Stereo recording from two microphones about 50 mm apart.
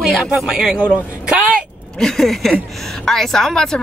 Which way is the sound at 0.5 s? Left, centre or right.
Centre.